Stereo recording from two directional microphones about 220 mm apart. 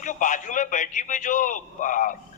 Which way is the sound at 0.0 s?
35° left (ahead or behind).